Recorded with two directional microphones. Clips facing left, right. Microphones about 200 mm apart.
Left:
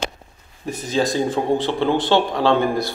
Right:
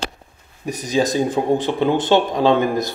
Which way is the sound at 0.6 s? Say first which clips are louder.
Right 2 dB; 15° right (ahead or behind).